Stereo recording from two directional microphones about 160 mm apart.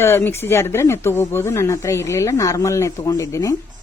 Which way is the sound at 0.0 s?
15° left (ahead or behind).